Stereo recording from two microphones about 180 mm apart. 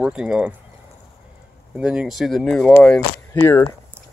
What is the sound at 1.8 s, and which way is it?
Speech, 5° right (ahead or behind).